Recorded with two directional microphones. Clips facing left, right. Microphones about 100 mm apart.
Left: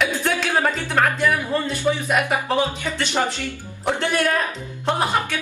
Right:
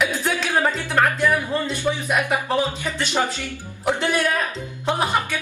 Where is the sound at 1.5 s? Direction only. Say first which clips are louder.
Left 2 dB; centre (ahead or behind).